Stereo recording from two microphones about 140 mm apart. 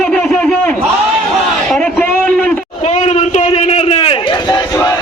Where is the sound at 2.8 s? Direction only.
50° left (ahead or behind).